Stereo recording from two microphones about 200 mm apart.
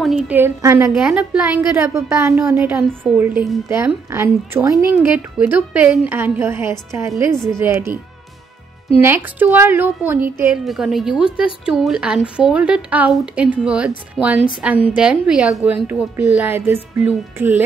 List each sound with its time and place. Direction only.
0.0 s a woman's voice: 5° right (ahead or behind)
9.0 s a woman's voice: 10° right (ahead or behind)